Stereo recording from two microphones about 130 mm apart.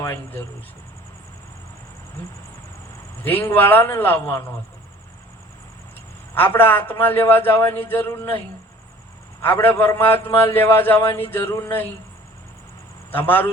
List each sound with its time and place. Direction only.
0.0 s a man's voice: 20° left (ahead or behind)
3.2 s a man's voice: 15° left (ahead or behind)
6.3 s a man's voice: 15° left (ahead or behind)
9.4 s a man's voice: 15° left (ahead or behind)
13.1 s a man's voice: 15° left (ahead or behind)